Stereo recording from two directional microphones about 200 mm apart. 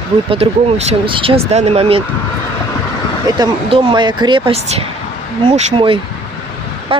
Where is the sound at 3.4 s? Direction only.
25° right (ahead or behind).